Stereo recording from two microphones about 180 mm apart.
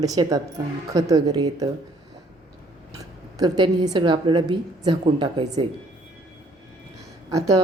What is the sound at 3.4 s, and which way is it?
A woman's voice, 25° right (ahead or behind).